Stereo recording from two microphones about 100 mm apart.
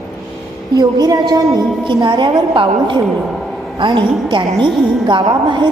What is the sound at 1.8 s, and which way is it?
A woman's voice, 50° right (ahead or behind).